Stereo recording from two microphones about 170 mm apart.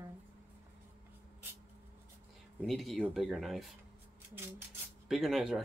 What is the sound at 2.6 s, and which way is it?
Speech, centre (ahead or behind).